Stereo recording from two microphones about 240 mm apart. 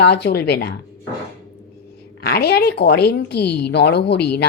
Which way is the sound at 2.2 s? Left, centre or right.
Left.